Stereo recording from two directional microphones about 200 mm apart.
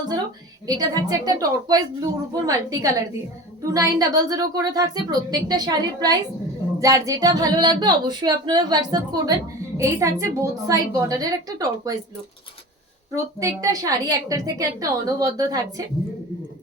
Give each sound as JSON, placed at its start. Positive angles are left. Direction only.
{"t": 0.7, "sound": "a woman's voice", "side_deg": -20}
{"t": 13.4, "sound": "a woman's voice", "side_deg": -15}